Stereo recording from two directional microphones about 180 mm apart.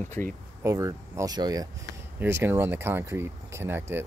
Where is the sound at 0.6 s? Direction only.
15° right (ahead or behind).